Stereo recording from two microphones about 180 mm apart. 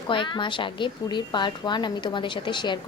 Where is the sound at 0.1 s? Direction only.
25° left (ahead or behind).